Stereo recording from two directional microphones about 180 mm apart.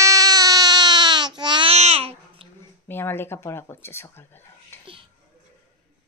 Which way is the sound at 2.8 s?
10° left (ahead or behind).